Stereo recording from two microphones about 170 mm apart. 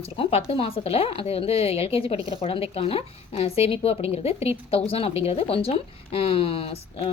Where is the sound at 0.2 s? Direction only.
35° left (ahead or behind).